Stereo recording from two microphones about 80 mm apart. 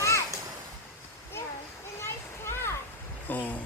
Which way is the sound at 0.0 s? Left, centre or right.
Left.